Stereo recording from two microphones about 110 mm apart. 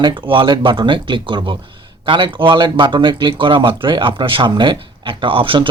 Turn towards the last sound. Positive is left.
turn(degrees=-50)  # may be behind; listen again after turning